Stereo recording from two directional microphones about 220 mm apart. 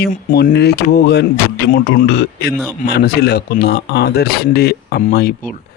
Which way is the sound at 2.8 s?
45° left (ahead or behind).